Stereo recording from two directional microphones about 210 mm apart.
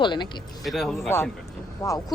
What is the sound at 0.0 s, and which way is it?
Speech, 20° left (ahead or behind).